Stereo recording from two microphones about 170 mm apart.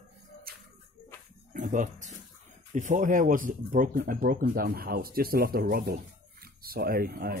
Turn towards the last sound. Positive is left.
turn(degrees=-65)  # may be behind; listen again after turning